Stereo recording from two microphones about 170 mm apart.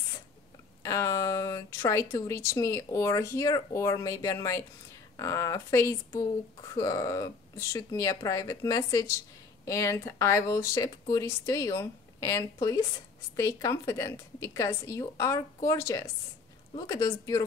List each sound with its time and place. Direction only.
0.8 s speech: 20° left (ahead or behind)